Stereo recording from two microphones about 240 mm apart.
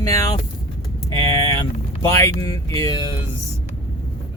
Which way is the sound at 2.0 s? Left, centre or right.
Centre.